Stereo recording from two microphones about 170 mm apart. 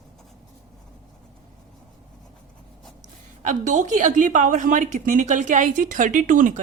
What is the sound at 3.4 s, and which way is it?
A woman's voice, 50° right (ahead or behind).